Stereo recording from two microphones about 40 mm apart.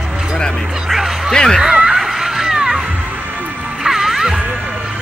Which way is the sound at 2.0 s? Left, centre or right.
Centre.